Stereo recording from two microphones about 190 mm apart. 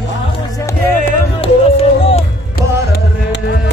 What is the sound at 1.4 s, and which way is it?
Music, 30° left (ahead or behind).